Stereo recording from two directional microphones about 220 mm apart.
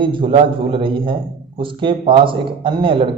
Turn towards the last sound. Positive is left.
turn(degrees=-25)  # may be behind; listen again after turning